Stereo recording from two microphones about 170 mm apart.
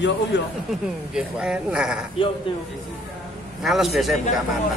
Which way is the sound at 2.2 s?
30° left (ahead or behind).